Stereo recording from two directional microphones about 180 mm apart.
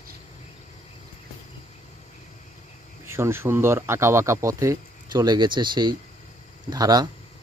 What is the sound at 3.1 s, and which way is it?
Speech, 15° right (ahead or behind).